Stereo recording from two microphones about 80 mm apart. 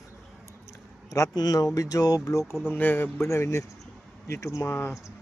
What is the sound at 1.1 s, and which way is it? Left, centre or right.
Speech, left.